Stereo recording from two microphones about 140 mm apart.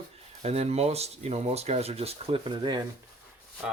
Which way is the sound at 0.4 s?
50° right (ahead or behind).